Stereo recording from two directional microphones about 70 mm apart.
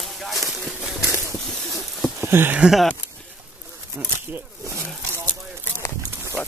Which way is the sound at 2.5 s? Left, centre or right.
Centre.